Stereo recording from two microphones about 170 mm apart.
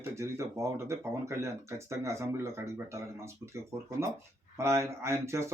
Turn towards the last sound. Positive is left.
turn(degrees=-15)  # may be behind; listen again after turning